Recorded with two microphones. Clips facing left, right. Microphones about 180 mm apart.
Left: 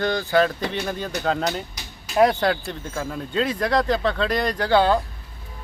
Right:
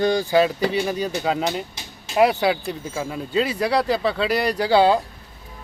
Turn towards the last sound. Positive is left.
turn(degrees=-10)  # may be behind; listen again after turning